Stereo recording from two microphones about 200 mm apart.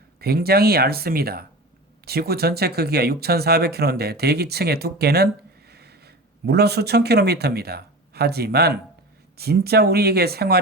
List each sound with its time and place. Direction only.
0.2 s a man's voice: 50° right (ahead or behind)